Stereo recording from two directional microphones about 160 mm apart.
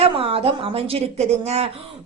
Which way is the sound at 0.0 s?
35° right (ahead or behind).